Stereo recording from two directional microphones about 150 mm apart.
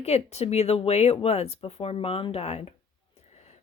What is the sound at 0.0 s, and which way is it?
Speech, 45° left (ahead or behind).